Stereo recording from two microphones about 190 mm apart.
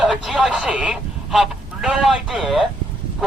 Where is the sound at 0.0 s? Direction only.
Centre (ahead or behind).